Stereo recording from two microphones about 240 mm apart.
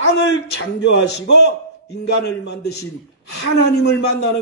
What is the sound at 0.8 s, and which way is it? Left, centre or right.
A man's voice, left.